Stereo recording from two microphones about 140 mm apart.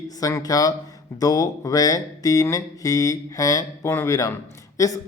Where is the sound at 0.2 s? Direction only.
25° left (ahead or behind).